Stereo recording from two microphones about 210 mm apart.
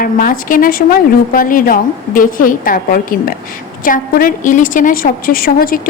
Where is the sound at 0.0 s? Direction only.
40° left (ahead or behind).